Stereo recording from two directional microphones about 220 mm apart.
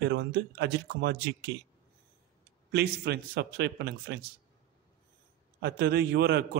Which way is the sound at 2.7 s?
50° right (ahead or behind).